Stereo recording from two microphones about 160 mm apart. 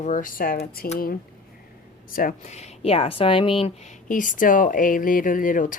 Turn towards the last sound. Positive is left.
turn(degrees=55)  # may be behind; listen again after turning